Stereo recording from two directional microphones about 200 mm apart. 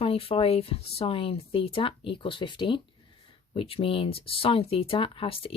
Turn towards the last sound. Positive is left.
turn(degrees=30)  # may be behind; listen again after turning